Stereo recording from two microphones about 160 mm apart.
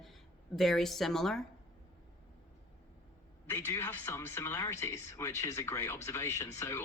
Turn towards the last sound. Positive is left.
turn(degrees=15)  # may be behind; listen again after turning